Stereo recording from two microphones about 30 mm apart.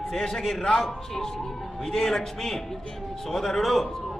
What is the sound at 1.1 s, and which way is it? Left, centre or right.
A man's voice, centre.